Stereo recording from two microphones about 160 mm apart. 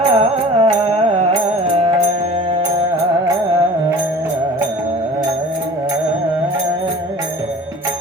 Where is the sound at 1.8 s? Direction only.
40° right (ahead or behind).